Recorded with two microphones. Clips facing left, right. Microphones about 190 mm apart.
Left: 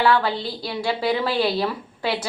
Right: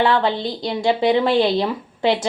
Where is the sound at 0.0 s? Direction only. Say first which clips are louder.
Right 2 dB; 25° right (ahead or behind).